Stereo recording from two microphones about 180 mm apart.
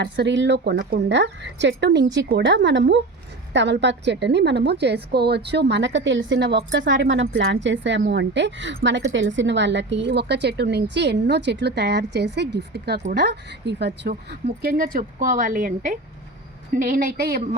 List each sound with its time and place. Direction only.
0.0 s a woman's voice: 75° right (ahead or behind)
2.1 s a woman's voice: 85° right
8.0 s a woman's voice: 75° right (ahead or behind); by 17.6 s 60° right (ahead or behind)